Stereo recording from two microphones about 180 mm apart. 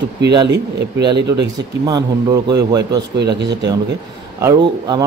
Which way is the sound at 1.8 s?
20° right (ahead or behind).